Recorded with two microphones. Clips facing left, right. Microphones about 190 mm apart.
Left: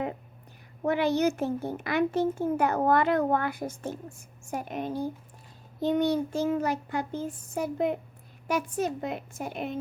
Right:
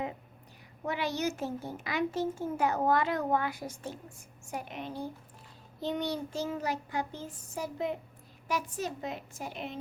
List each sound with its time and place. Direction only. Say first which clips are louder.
0.9 s a child's voice: left 8 dB; 55° left (ahead or behind)
4.5 s child singing: left 6 dB; 45° left (ahead or behind)
8.4 s a child's voice: left 6 dB; 55° left (ahead or behind)